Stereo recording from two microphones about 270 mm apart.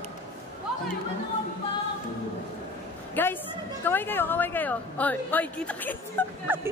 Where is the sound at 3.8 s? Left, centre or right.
Centre.